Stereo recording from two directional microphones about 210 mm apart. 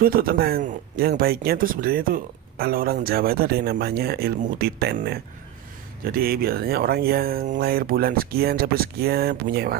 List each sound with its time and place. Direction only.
0.0 s speech: 45° right (ahead or behind)